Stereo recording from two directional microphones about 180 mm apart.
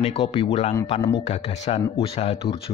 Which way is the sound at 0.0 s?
35° left (ahead or behind).